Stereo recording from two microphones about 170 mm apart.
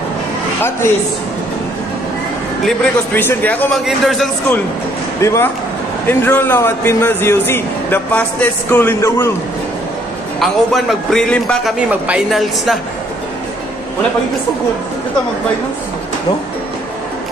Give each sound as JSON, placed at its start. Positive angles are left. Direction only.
{"t": 0.6, "sound": "speech", "side_deg": 15}
{"t": 3.2, "sound": "a man's voice", "side_deg": 10}
{"t": 5.2, "sound": "a man's voice", "side_deg": 15}
{"t": 10.4, "sound": "a man's voice", "side_deg": 0}
{"t": 11.9, "sound": "a man's voice", "side_deg": -5}